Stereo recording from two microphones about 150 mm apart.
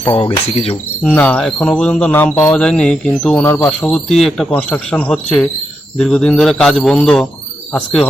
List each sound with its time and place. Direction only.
0.0 s speech: 35° left (ahead or behind)
1.0 s speech: 10° left (ahead or behind)